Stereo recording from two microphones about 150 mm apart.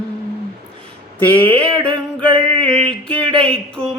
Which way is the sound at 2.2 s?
35° right (ahead or behind).